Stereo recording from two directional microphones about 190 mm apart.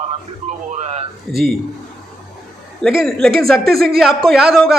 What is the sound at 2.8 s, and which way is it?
A man's voice, 5° left (ahead or behind).